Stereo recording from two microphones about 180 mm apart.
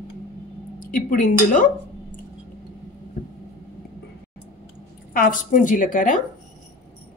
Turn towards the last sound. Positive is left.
turn(degrees=50)  # may be behind; listen again after turning